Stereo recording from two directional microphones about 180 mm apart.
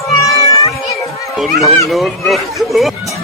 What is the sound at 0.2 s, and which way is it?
Cat, 20° left (ahead or behind).